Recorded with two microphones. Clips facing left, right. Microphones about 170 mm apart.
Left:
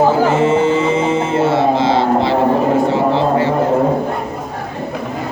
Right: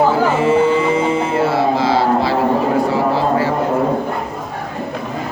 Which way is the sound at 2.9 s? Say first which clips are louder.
Left 2 dB; 25° left (ahead or behind).